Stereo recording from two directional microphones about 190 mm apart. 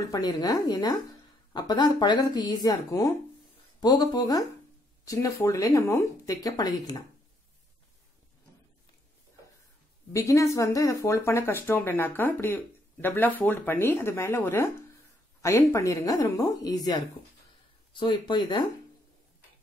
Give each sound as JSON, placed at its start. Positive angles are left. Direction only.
{"t": 0.0, "sound": "speech", "side_deg": 20}
{"t": 10.1, "sound": "speech", "side_deg": 15}